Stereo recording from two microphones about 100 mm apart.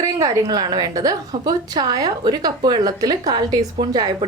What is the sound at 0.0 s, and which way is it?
A woman's voice, 35° right (ahead or behind).